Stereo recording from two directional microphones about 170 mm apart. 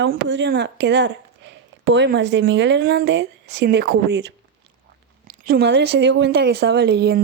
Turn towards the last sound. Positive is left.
turn(degrees=-75)  # may be behind; listen again after turning